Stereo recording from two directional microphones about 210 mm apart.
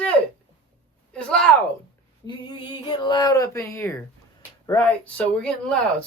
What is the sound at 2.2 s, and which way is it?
Speech, 20° left (ahead or behind).